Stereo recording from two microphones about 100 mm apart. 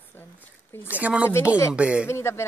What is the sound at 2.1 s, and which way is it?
Speech, 25° left (ahead or behind).